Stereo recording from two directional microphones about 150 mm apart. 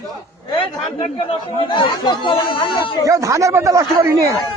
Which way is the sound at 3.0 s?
20° right (ahead or behind).